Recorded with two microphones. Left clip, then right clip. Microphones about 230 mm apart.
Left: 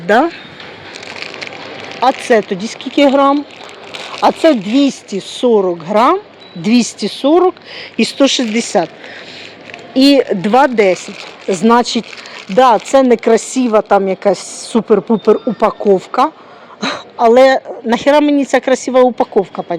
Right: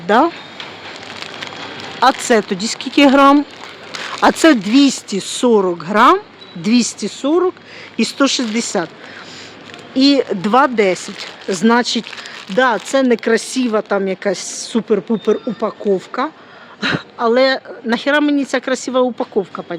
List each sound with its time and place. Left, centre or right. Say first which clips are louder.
0.1 s speech: left 1 dB; centre
2.0 s speech: left 2 dB; centre
5.2 s speech: left 2 dB; right
5.7 s speech: even; centre
6.8 s speech: left 4 dB; right
7.3 s speech: left 5 dB; centre
10.0 s speech: left 4 dB; centre